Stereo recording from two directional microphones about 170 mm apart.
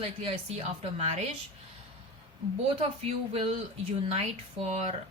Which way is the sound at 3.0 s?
40° right (ahead or behind).